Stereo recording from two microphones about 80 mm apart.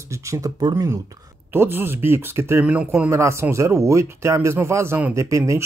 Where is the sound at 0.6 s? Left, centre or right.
Right.